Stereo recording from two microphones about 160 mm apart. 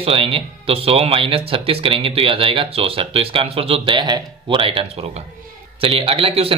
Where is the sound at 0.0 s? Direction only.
35° right (ahead or behind).